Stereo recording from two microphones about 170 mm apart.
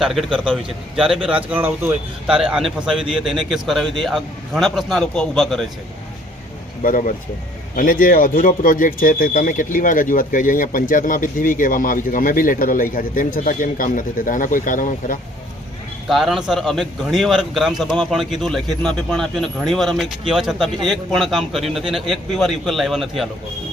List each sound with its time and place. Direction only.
0.0 s a man's voice: centre (ahead or behind)
6.8 s speech: 50° left (ahead or behind)
16.0 s a man's voice: centre (ahead or behind)